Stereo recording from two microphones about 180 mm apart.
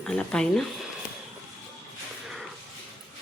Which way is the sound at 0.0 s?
5° left (ahead or behind).